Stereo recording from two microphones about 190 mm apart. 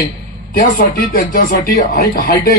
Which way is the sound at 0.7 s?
50° left (ahead or behind).